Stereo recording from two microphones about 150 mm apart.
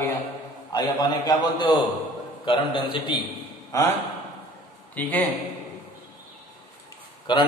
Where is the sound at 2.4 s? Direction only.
35° left (ahead or behind).